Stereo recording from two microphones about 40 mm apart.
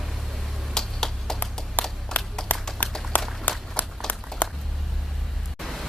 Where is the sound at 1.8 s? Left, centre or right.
Left.